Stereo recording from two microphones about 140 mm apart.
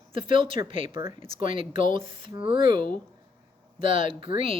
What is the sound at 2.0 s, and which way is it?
Speech, 40° right (ahead or behind).